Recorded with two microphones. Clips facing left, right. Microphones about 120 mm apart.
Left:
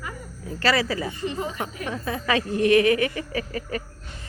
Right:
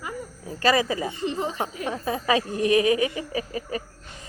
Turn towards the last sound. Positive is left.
turn(degrees=-15)  # may be behind; listen again after turning